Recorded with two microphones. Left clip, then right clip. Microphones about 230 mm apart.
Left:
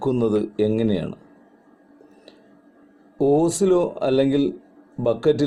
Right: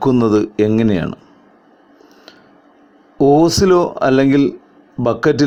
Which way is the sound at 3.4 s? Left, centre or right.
Right.